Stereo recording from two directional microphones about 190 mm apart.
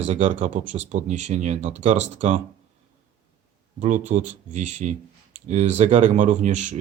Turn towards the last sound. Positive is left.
turn(degrees=-40)  # may be behind; listen again after turning